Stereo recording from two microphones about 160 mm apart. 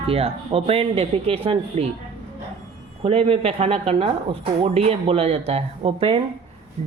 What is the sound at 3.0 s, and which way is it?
Speech, 35° right (ahead or behind).